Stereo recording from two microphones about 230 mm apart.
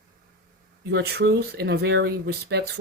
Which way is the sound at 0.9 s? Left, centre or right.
Right.